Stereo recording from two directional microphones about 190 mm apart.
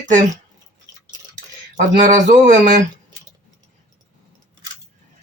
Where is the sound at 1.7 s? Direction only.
40° right (ahead or behind).